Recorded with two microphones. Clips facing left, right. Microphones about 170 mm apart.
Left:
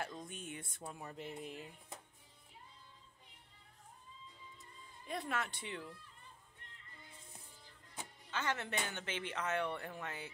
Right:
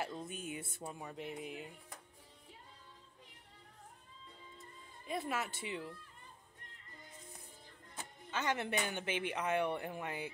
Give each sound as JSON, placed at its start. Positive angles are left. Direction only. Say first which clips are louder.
{"t": 0.0, "sound": "speech", "louder": "right 3 dB", "side_deg": -5}
{"t": 5.0, "sound": "speech", "louder": "right 2 dB", "side_deg": 0}
{"t": 8.3, "sound": "speech", "louder": "right 3 dB", "side_deg": -15}